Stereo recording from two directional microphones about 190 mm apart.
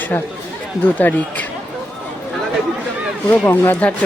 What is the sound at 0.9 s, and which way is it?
Speech, 10° left (ahead or behind).